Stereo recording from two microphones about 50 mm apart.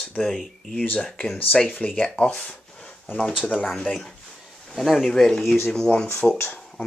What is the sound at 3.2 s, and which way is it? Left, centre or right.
Speech, centre.